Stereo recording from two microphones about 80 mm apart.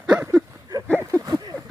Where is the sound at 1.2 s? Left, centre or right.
Right.